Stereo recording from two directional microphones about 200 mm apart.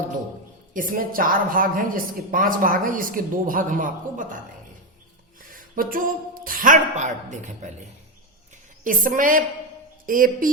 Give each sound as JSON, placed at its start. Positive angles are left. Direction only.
{"t": 0.7, "sound": "a woman's voice", "side_deg": -45}
{"t": 5.4, "sound": "speech", "side_deg": -45}
{"t": 8.8, "sound": "a woman's voice", "side_deg": -40}